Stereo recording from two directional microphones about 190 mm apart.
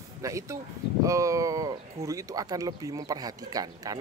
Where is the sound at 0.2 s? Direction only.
15° right (ahead or behind).